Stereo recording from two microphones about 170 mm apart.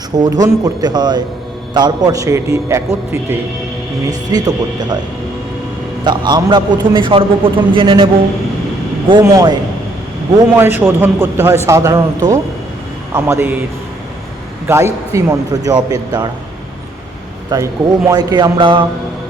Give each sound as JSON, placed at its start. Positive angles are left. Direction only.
{"t": 0.2, "sound": "a man's voice", "side_deg": -20}
{"t": 6.1, "sound": "a man's voice", "side_deg": -25}
{"t": 10.5, "sound": "a man's voice", "side_deg": -10}
{"t": 14.7, "sound": "a man's voice", "side_deg": -15}
{"t": 17.5, "sound": "a man's voice", "side_deg": -20}